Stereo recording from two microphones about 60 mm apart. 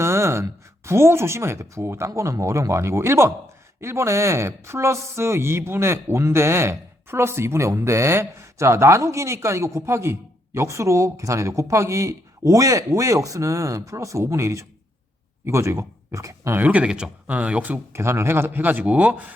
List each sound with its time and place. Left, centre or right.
0.0 s a sound: right
0.9 s speech: right
2.0 s speech: right
16.6 s speech: right
17.9 s a man's voice: right